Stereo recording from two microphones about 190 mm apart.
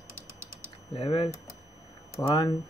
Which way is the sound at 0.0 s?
90° left.